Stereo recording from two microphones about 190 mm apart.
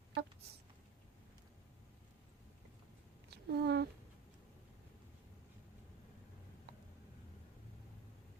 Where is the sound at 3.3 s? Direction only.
60° right (ahead or behind).